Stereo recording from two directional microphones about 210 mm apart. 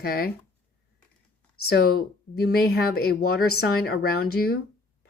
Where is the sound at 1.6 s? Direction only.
45° left (ahead or behind).